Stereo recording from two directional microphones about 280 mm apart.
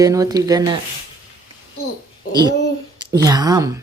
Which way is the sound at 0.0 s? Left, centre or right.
Centre.